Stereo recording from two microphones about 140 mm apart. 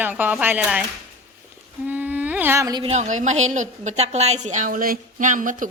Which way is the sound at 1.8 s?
10° right (ahead or behind).